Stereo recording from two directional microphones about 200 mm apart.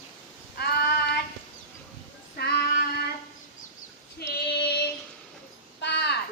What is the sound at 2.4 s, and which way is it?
Child singing, 55° left (ahead or behind).